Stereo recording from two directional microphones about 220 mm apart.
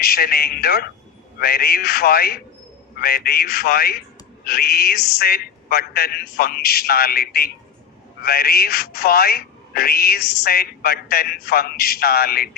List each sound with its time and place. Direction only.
0.0 s speech: 45° left (ahead or behind)